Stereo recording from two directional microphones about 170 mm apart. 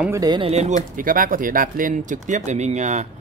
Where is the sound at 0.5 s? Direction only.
40° right (ahead or behind).